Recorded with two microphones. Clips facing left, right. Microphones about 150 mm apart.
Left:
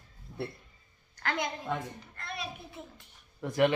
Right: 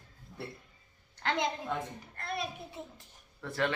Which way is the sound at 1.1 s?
25° right (ahead or behind).